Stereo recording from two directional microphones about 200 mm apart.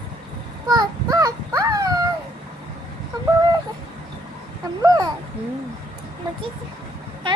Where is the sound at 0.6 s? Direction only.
20° right (ahead or behind).